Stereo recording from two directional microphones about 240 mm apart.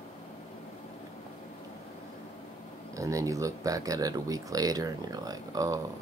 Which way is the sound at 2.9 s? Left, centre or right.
Centre.